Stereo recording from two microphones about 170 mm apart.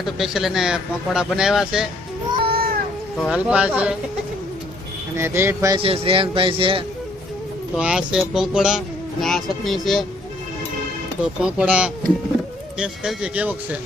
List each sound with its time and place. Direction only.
0.0 s speech: centre (ahead or behind)
2.4 s cat: 60° right (ahead or behind)
3.2 s speech: 5° right (ahead or behind)
5.1 s speech: 15° right (ahead or behind)
5.8 s speech: 35° right (ahead or behind)
7.8 s speech: 5° right (ahead or behind)
11.2 s speech: 5° right (ahead or behind)